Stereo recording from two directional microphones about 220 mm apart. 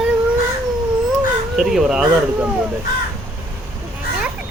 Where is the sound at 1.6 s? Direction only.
Centre (ahead or behind).